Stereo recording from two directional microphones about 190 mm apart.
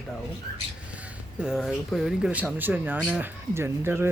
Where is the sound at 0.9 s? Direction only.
5° right (ahead or behind).